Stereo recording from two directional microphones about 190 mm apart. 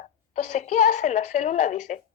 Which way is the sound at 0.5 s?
40° left (ahead or behind).